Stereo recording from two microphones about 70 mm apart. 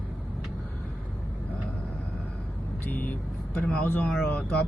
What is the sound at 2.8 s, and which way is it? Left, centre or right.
Speech, left.